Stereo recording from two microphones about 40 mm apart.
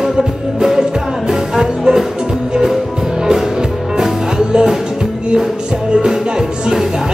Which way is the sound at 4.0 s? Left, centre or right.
Centre.